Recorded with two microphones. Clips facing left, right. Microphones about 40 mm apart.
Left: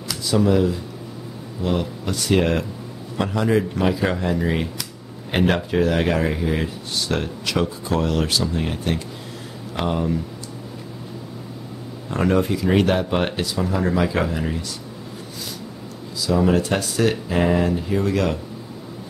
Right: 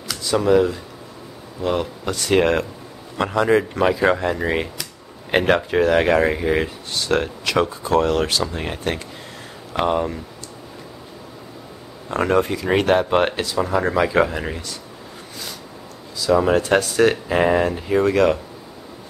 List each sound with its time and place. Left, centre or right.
0.1 s speech: centre
12.1 s speech: centre
16.3 s speech: right